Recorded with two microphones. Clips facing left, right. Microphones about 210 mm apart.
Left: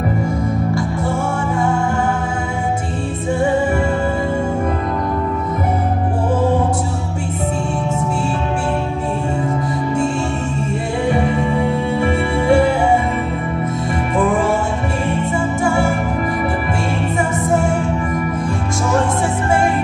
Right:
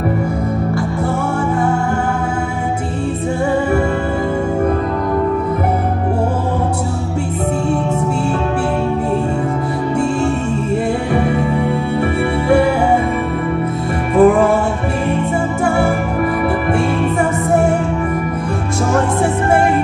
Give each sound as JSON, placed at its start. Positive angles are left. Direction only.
{"t": 14.1, "sound": "music", "side_deg": -60}
{"t": 15.6, "sound": "music", "side_deg": -60}